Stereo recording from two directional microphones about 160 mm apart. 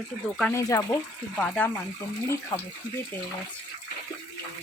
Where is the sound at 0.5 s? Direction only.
20° left (ahead or behind).